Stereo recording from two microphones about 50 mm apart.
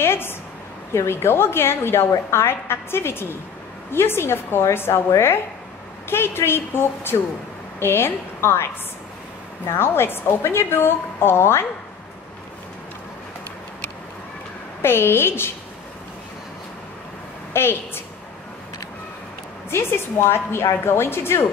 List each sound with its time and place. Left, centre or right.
0.0 s a sound: left
0.9 s a woman's voice: left
6.0 s a woman's voice: left
9.7 s a woman's voice: left
14.8 s a woman's voice: left
17.5 s a woman's voice: left
19.7 s a woman's voice: left